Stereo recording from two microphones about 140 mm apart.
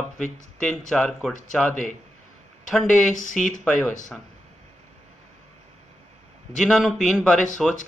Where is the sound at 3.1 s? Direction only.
65° left (ahead or behind).